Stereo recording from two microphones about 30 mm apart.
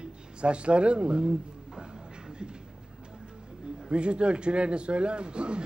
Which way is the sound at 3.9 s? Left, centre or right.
Right.